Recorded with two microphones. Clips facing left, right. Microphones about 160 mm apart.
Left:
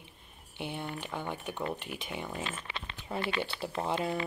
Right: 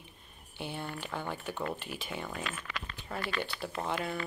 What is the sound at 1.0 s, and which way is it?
Speech, 15° left (ahead or behind).